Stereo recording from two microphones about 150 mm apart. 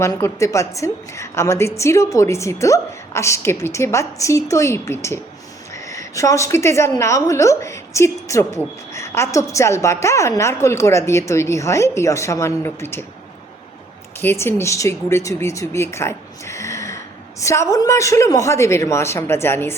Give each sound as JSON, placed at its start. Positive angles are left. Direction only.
{"t": 0.0, "sound": "a woman's voice", "side_deg": 20}
{"t": 14.2, "sound": "a woman's voice", "side_deg": 15}